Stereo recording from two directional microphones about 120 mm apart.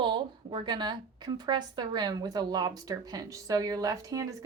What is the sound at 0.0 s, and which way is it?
A woman's voice, 40° right (ahead or behind).